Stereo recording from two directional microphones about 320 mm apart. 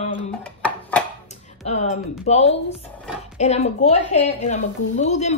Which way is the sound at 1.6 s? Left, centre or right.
Left.